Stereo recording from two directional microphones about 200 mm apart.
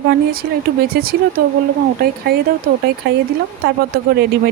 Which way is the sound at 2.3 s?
50° right (ahead or behind).